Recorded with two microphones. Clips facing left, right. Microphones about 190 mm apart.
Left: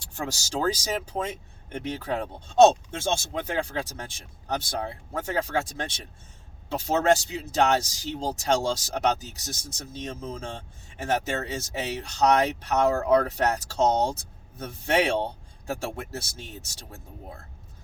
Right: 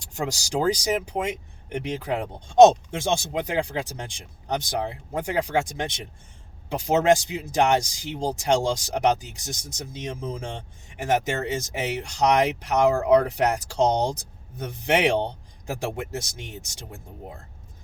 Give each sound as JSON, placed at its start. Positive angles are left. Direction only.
{"t": 0.1, "sound": "speech", "side_deg": -15}